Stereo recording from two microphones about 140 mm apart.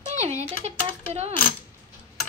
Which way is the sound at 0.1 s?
55° right (ahead or behind).